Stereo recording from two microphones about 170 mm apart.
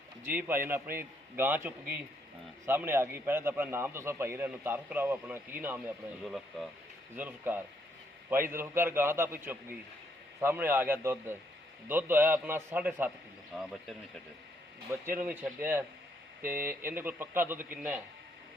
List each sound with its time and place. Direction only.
0.3 s a man's voice: 10° right (ahead or behind)
6.2 s speech: centre (ahead or behind)
7.2 s a man's voice: 10° right (ahead or behind)
13.5 s speech: centre (ahead or behind)
14.9 s a man's voice: 15° right (ahead or behind)